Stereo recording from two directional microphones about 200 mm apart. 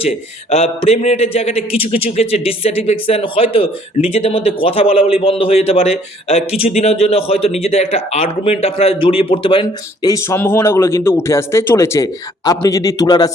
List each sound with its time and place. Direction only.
0.0 s speech: 30° left (ahead or behind)